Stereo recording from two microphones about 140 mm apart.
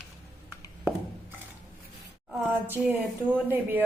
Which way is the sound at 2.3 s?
15° right (ahead or behind).